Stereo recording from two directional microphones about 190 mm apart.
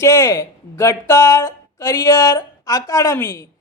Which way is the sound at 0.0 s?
15° left (ahead or behind).